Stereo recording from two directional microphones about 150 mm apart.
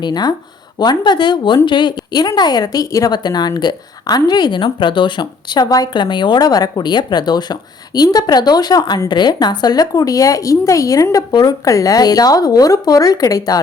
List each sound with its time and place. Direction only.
0.0 s a woman's voice: 25° left (ahead or behind)